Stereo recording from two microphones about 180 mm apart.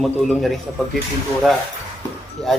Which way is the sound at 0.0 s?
Centre (ahead or behind).